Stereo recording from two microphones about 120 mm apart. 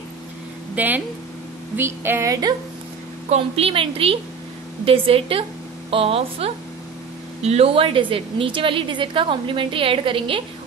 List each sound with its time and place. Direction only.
0.7 s speech: 15° right (ahead or behind)
1.8 s a sound: 20° right (ahead or behind)
3.3 s a woman's voice: 55° right (ahead or behind)